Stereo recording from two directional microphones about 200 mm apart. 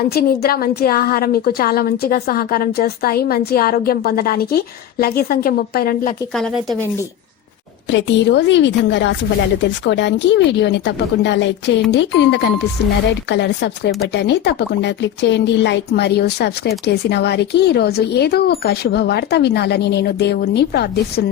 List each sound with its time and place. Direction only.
0.1 s a woman's voice: 50° left (ahead or behind)
6.3 s speech: centre (ahead or behind)
7.9 s speech: 60° left (ahead or behind)